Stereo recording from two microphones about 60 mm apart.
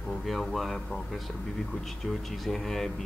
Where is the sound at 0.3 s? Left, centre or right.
Centre.